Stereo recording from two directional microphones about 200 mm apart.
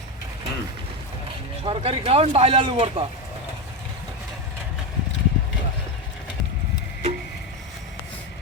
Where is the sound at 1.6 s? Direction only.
25° right (ahead or behind).